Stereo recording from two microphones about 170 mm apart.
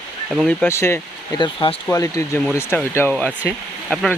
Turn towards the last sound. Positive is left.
turn(degrees=5)  # may be behind; listen again after turning